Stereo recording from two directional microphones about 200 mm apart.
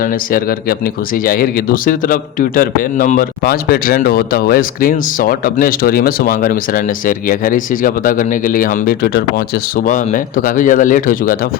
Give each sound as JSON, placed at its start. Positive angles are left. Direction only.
{"t": 0.0, "sound": "a man's voice", "side_deg": 45}